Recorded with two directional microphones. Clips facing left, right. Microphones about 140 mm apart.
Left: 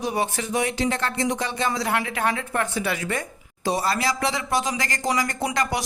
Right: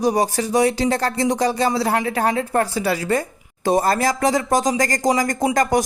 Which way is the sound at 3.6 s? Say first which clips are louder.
Right 6 dB; 50° right (ahead or behind).